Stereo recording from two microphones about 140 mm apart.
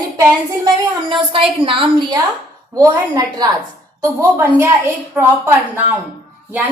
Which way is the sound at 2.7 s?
25° right (ahead or behind).